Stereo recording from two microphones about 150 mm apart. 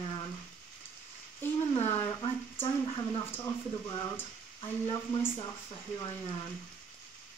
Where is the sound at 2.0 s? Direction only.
35° left (ahead or behind).